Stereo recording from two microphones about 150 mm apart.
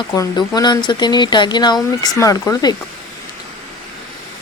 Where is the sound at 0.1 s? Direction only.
25° left (ahead or behind).